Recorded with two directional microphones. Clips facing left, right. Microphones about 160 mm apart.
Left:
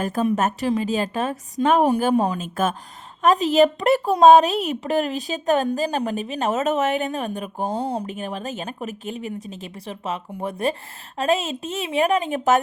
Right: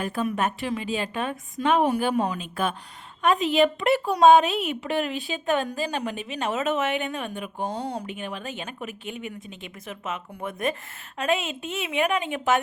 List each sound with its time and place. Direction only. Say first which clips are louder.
0.0 s a woman's voice: left 5 dB; 40° left (ahead or behind)
7.8 s a woman's voice: left 5 dB; 30° left (ahead or behind)